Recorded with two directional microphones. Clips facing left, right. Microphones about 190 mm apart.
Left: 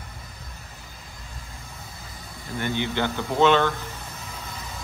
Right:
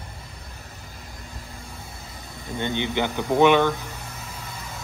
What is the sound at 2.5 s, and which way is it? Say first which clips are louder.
Speech: right 1 dB; 20° right (ahead or behind).